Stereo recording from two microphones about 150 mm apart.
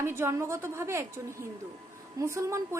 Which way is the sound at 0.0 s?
20° right (ahead or behind).